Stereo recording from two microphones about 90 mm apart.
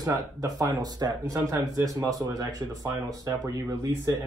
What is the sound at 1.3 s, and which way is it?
Speech, 35° right (ahead or behind).